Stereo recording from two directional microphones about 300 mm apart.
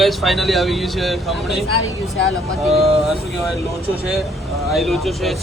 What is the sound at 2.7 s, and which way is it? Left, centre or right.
Speech, centre.